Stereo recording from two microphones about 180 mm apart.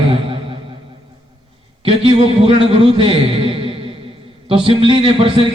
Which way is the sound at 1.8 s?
30° right (ahead or behind).